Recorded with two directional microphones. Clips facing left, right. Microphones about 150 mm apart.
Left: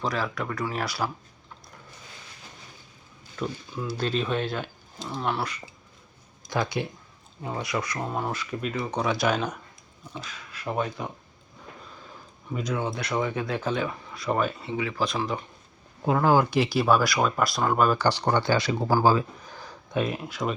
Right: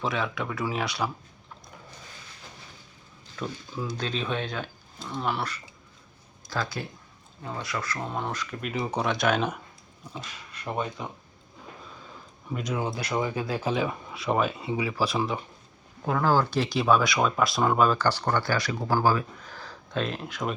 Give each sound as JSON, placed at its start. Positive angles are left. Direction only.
{"t": 0.0, "sound": "speech", "side_deg": 0}
{"t": 3.3, "sound": "speech", "side_deg": 5}
{"t": 6.5, "sound": "speech", "side_deg": 20}
{"t": 12.5, "sound": "speech", "side_deg": 0}
{"t": 12.9, "sound": "speech", "side_deg": -30}
{"t": 13.6, "sound": "speech", "side_deg": -10}
{"t": 16.0, "sound": "speech", "side_deg": 15}
{"t": 17.9, "sound": "speech", "side_deg": 15}